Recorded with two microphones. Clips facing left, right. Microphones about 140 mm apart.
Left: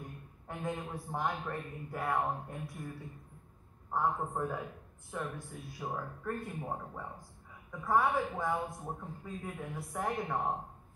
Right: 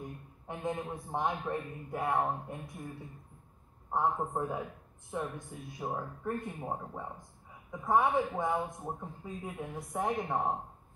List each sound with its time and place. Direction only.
0.5 s a woman's voice: 25° right (ahead or behind)
3.9 s a woman's voice: 20° right (ahead or behind)